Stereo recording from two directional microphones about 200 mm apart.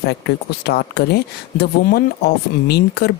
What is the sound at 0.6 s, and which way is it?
Speech, 55° left (ahead or behind).